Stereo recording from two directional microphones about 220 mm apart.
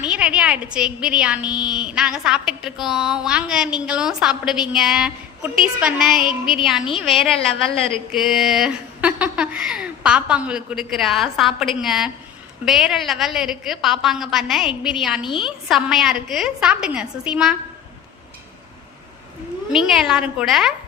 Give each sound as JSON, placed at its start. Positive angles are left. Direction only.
{"t": 0.0, "sound": "a woman's voice", "side_deg": -5}
{"t": 15.2, "sound": "a woman's voice", "side_deg": 20}
{"t": 15.4, "sound": "a woman's voice", "side_deg": 0}
{"t": 20.0, "sound": "a woman's voice", "side_deg": -5}